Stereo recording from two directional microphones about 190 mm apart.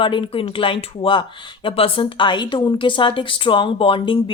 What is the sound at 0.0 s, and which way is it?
A woman's voice, 25° left (ahead or behind).